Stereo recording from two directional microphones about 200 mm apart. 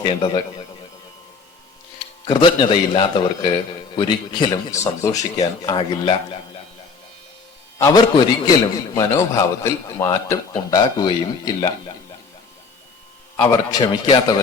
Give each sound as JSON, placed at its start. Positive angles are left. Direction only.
{"t": 0.0, "sound": "speech", "side_deg": 20}
{"t": 2.2, "sound": "speech", "side_deg": 25}
{"t": 7.8, "sound": "a man's voice", "side_deg": 20}
{"t": 13.5, "sound": "speech", "side_deg": 20}